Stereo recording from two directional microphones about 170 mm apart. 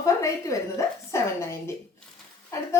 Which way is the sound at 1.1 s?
15° left (ahead or behind).